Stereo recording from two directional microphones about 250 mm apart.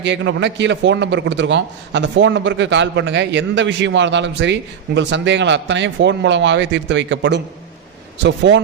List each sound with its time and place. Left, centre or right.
0.0 s a man's voice: right